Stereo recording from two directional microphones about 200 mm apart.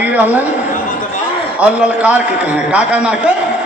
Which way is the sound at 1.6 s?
5° right (ahead or behind).